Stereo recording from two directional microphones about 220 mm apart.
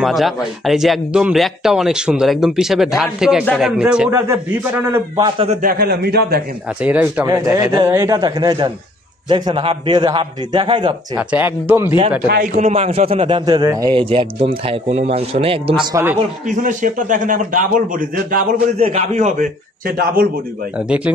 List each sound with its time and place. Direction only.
0.0 s speech: centre (ahead or behind); by 5.6 s 20° right (ahead or behind)
5.6 s a man's voice: 45° right (ahead or behind)
6.8 s a man's voice: 5° right (ahead or behind); by 11.0 s 25° right (ahead or behind)
11.1 s speech: 5° right (ahead or behind)
12.5 s a man's voice: 30° right (ahead or behind)
16.4 s a man's voice: 35° right (ahead or behind)
18.8 s a man's voice: 30° right (ahead or behind)
20.7 s speech: 5° right (ahead or behind)